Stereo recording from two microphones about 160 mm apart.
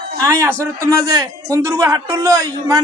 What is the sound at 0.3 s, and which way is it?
A man's voice, 20° right (ahead or behind).